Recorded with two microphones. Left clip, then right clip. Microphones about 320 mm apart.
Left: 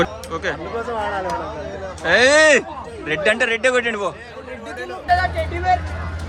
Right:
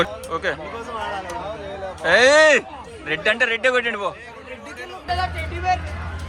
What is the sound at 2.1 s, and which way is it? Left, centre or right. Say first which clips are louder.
A man's voice: left 1 dB; centre.